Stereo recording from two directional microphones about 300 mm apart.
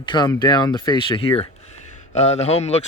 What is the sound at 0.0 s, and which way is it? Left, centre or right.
Speech, centre.